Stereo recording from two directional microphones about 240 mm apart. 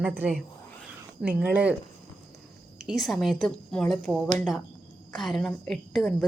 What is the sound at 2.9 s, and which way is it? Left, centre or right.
A woman's voice, centre.